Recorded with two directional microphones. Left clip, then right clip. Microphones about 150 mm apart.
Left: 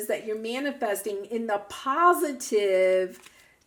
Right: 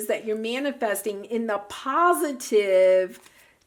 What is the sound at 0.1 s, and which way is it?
Speech, 25° right (ahead or behind).